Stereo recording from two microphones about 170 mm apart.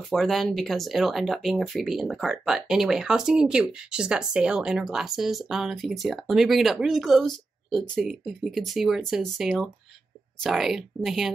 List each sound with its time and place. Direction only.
0.1 s speech: centre (ahead or behind)